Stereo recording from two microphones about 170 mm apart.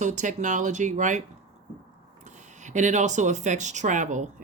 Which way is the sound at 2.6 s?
45° right (ahead or behind).